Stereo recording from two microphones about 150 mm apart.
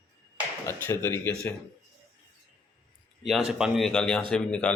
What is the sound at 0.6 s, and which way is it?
Speech, 15° left (ahead or behind).